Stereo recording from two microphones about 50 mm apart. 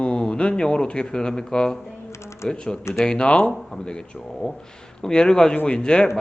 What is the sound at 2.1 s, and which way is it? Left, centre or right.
Typing, left.